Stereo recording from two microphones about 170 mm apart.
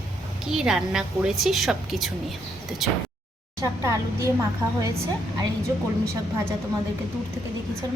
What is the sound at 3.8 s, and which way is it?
A woman's voice, 15° right (ahead or behind).